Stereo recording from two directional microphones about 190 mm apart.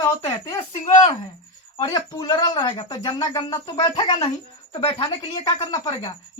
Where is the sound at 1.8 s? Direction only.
20° left (ahead or behind).